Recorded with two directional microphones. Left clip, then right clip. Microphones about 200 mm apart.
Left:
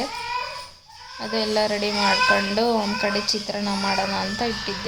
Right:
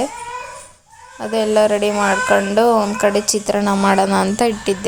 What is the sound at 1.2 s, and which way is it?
Speech, 30° right (ahead or behind).